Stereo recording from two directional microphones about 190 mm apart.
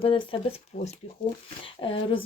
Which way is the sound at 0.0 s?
25° left (ahead or behind).